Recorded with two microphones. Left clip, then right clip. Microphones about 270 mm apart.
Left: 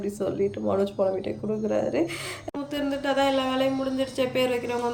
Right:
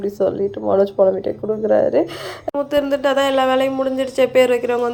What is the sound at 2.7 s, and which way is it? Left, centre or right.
Speech, centre.